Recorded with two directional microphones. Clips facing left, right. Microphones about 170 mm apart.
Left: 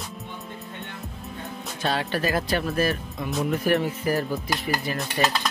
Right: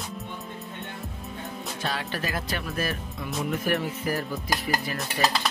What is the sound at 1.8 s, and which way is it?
Speech, 35° left (ahead or behind).